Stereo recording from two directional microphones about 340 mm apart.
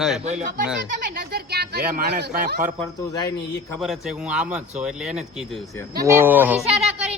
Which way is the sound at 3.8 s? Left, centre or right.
Centre.